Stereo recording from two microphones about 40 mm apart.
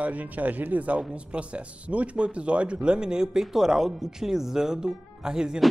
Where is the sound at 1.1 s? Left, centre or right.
Right.